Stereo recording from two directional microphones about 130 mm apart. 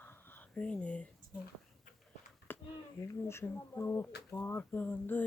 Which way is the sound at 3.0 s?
20° left (ahead or behind).